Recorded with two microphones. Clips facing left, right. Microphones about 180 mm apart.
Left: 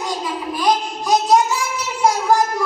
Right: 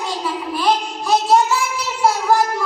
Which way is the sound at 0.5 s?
15° left (ahead or behind).